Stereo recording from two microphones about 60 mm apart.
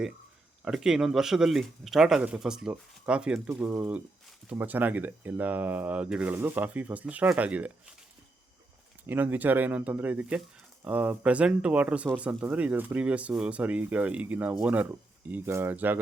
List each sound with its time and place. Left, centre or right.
0.6 s speech: centre
4.5 s speech: right
6.3 s speech: right
9.0 s speech: right